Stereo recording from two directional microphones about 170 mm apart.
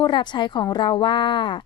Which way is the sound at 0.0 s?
25° left (ahead or behind).